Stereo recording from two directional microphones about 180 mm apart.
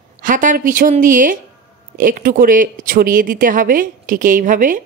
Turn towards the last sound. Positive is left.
turn(degrees=-45)  # may be behind; listen again after turning